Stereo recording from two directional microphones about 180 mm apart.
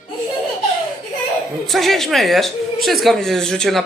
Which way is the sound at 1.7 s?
Centre (ahead or behind).